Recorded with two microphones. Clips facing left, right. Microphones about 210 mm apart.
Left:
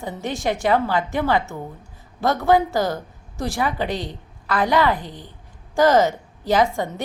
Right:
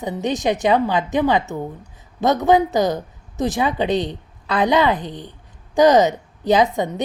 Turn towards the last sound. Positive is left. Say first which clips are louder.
# right 3 dB
turn(degrees=-20)  # may be behind; listen again after turning